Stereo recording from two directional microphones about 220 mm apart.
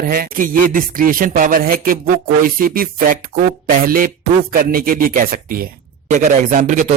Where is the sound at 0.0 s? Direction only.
40° right (ahead or behind).